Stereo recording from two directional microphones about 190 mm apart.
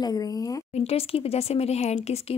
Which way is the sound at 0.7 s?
30° left (ahead or behind).